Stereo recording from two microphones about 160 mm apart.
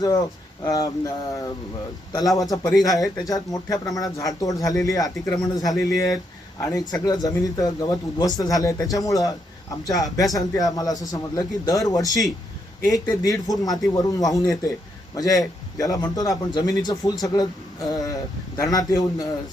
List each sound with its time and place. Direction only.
0.6 s a man's voice: 25° left (ahead or behind)